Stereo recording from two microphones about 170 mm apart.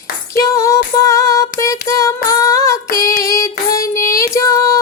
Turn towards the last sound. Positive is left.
turn(degrees=20)  # may be behind; listen again after turning